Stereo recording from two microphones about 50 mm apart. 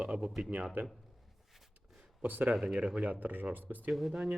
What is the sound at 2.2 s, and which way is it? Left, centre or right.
Speech, right.